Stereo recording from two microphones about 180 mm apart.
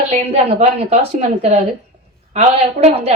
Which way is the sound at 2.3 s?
35° right (ahead or behind).